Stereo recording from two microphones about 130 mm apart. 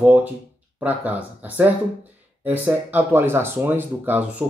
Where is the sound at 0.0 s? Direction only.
15° right (ahead or behind).